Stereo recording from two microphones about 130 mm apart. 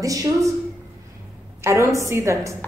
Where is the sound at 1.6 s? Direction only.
20° right (ahead or behind).